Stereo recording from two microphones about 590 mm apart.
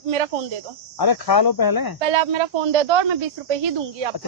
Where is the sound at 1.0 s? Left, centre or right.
Left.